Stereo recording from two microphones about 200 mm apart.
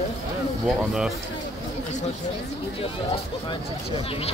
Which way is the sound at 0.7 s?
5° right (ahead or behind).